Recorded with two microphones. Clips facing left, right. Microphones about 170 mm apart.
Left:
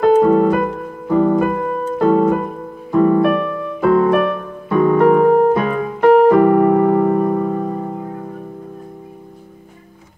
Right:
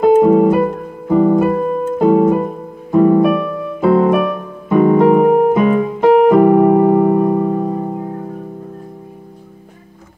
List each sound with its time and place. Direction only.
0.0 s keyboard: 10° right (ahead or behind)
1.6 s music: 15° right (ahead or behind)
3.0 s piano: 15° right (ahead or behind)
3.8 s music: 25° right (ahead or behind)
4.1 s piano: 15° right (ahead or behind)